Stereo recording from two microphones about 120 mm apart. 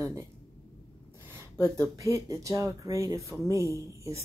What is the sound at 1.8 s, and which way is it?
Speech, 30° right (ahead or behind).